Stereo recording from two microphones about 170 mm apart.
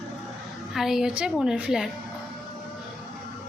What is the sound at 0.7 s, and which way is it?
Speech, centre (ahead or behind).